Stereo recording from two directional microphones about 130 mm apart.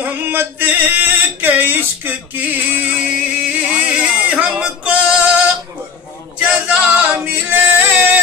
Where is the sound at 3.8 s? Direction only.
5° right (ahead or behind).